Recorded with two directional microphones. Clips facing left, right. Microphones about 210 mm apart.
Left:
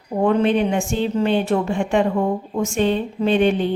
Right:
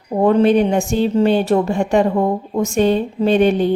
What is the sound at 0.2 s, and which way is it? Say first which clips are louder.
A woman's voice: right 4 dB; 35° right (ahead or behind).